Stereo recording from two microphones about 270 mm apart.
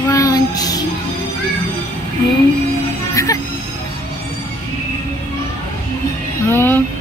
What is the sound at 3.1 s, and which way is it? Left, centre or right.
Speech, centre.